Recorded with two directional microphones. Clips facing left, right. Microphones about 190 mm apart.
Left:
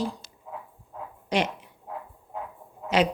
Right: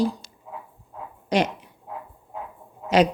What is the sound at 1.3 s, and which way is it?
Speech, 40° right (ahead or behind).